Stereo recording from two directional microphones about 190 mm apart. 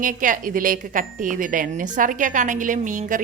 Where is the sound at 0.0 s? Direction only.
45° right (ahead or behind).